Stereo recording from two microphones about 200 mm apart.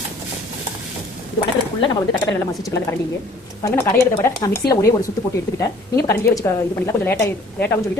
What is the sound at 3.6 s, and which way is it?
A woman's voice, 15° left (ahead or behind).